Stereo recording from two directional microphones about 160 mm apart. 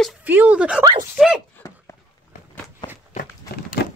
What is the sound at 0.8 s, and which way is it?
Speech, 25° right (ahead or behind).